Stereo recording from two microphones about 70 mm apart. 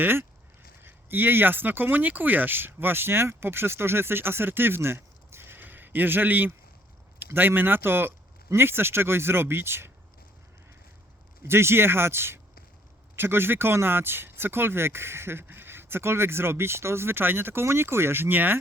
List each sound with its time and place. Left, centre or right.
0.0 s speech: right
11.4 s speech: right